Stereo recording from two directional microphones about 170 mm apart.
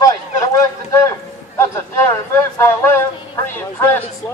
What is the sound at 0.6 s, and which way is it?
Speech, 20° left (ahead or behind).